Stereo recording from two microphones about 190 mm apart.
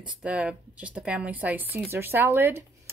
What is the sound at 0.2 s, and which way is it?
Speech, 5° right (ahead or behind).